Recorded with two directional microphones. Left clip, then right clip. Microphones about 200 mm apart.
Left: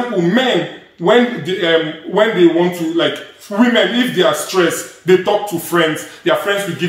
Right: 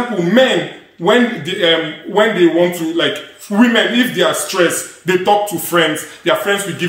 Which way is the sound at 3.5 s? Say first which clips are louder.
Even; 25° right (ahead or behind).